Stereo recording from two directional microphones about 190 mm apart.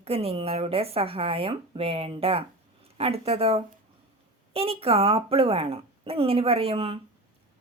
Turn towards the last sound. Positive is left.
turn(degrees=-30)  # may be behind; listen again after turning